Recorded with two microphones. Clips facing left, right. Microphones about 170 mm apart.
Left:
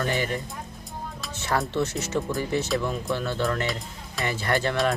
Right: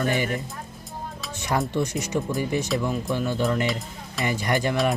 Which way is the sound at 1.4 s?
15° right (ahead or behind).